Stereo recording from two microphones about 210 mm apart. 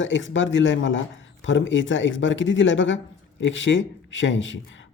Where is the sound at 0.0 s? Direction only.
65° left (ahead or behind).